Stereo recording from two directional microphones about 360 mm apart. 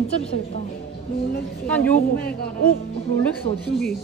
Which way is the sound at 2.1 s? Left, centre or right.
Left.